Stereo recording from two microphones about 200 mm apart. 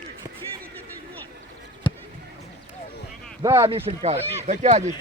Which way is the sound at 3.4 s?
20° right (ahead or behind).